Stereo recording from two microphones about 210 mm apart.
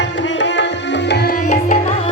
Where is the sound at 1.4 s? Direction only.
35° left (ahead or behind).